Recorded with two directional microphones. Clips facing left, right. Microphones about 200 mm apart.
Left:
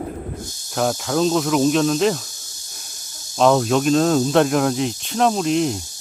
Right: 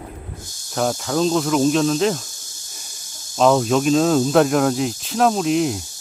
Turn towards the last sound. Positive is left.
turn(degrees=-5)  # may be behind; listen again after turning